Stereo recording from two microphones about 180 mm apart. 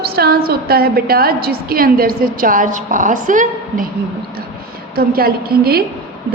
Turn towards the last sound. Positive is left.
turn(degrees=-60)  # may be behind; listen again after turning